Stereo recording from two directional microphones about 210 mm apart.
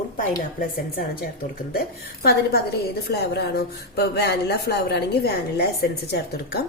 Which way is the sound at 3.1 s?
50° left (ahead or behind).